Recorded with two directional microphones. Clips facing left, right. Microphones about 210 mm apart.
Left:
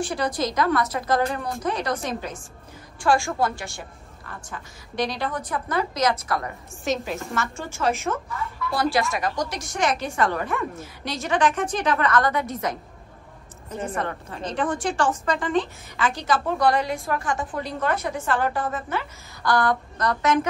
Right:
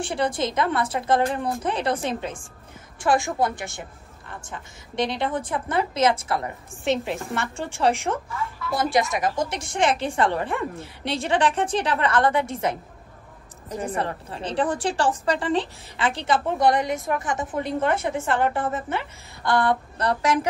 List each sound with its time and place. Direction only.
0.1 s a woman's voice: 25° right (ahead or behind)
8.7 s a woman's voice: 20° right (ahead or behind)
13.9 s a woman's voice: 30° right (ahead or behind)